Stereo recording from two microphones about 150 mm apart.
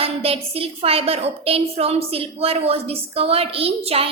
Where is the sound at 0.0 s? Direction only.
40° right (ahead or behind).